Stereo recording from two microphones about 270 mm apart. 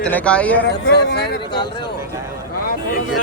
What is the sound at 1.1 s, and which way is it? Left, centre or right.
Speech, left.